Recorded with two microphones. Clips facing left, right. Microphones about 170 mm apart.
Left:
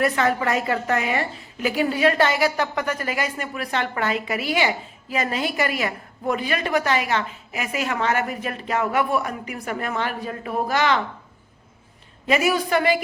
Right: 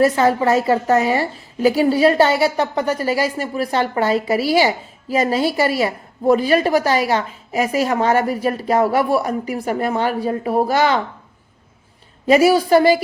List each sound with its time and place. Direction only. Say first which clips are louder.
0.0 s a woman's voice: right 6 dB; 30° right (ahead or behind)
12.2 s a woman's voice: right 8 dB; 35° right (ahead or behind)